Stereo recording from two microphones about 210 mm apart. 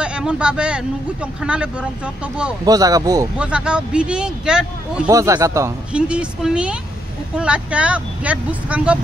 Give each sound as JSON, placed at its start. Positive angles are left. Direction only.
{"t": 0.0, "sound": "speech", "side_deg": -5}
{"t": 2.6, "sound": "speech", "side_deg": -15}
{"t": 3.3, "sound": "speech", "side_deg": -5}
{"t": 5.0, "sound": "speech", "side_deg": -15}